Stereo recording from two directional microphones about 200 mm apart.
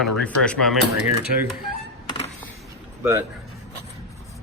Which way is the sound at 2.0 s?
25° left (ahead or behind).